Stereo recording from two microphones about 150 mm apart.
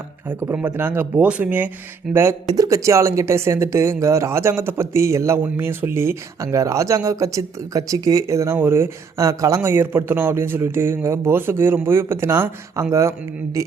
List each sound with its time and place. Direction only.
0.3 s speech: 15° right (ahead or behind)
2.6 s speech: 20° right (ahead or behind)